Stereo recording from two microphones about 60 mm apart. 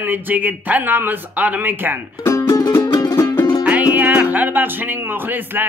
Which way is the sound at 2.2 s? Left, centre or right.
Left.